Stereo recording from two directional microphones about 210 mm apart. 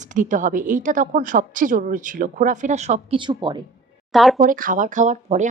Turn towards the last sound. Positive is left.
turn(degrees=-35)  # may be behind; listen again after turning